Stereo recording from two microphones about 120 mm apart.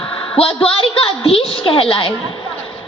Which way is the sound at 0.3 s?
50° left (ahead or behind).